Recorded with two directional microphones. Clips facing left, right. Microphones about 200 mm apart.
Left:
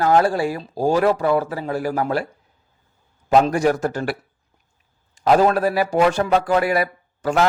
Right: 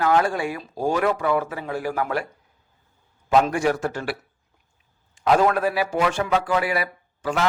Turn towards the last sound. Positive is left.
turn(degrees=45)  # may be behind; listen again after turning